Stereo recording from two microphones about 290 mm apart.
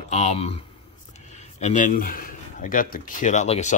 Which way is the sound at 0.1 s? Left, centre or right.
Left.